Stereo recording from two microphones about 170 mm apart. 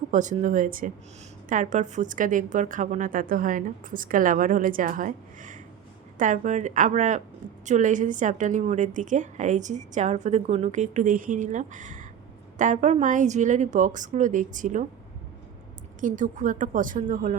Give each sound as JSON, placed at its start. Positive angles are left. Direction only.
{"t": 0.1, "sound": "a woman's voice", "side_deg": -45}
{"t": 16.0, "sound": "a woman's voice", "side_deg": -50}